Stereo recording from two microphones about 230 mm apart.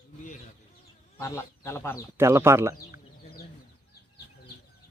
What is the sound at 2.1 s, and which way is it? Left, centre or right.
Speech, centre.